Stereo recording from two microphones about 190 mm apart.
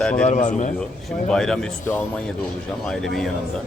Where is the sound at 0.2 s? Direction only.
40° left (ahead or behind).